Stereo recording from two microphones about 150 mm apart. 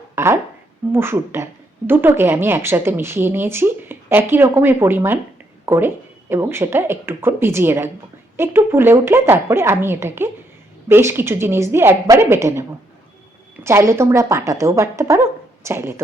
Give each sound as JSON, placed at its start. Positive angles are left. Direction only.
{"t": 0.2, "sound": "a sound", "side_deg": -20}
{"t": 0.9, "sound": "a woman's voice", "side_deg": -15}
{"t": 13.7, "sound": "speech", "side_deg": -15}